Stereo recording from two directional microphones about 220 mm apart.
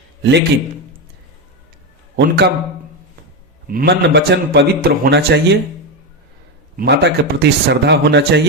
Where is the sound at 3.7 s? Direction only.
50° right (ahead or behind).